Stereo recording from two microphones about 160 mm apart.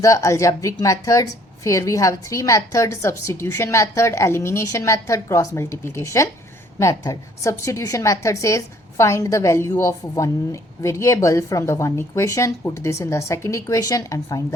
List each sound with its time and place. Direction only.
0.0 s a woman's voice: 20° left (ahead or behind)